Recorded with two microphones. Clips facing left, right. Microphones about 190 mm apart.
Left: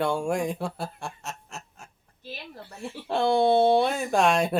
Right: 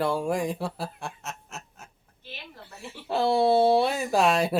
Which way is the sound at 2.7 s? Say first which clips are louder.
Even; 5° right (ahead or behind).